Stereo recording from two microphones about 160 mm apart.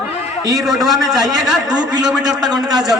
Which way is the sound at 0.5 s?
Centre (ahead or behind).